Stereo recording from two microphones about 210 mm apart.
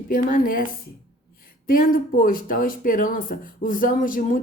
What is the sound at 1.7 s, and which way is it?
Speech, 40° left (ahead or behind).